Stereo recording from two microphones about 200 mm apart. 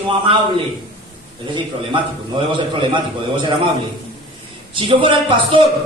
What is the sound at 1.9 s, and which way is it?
A man's voice, 25° right (ahead or behind).